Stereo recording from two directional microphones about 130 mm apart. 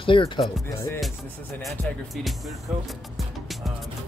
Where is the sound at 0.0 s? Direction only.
40° left (ahead or behind).